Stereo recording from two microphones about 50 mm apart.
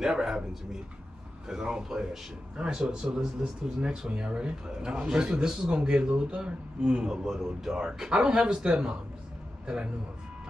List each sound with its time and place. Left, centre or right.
0.0 s a man's voice: centre
1.5 s a man's voice: centre